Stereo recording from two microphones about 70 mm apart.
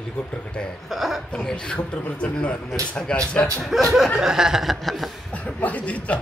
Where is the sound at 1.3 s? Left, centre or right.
Centre.